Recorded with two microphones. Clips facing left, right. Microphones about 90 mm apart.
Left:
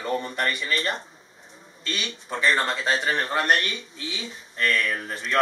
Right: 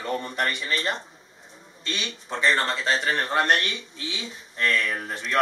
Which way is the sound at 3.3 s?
20° right (ahead or behind).